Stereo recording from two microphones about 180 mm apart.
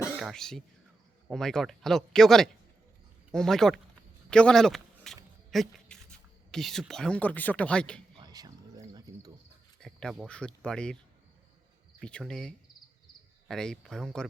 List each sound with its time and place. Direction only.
0.2 s speech: centre (ahead or behind)
8.2 s cricket: 20° right (ahead or behind)
9.8 s speech: 5° left (ahead or behind)
11.9 s speech: 5° left (ahead or behind)